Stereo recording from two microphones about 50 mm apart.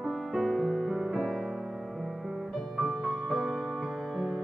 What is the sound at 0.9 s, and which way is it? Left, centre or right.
Music, centre.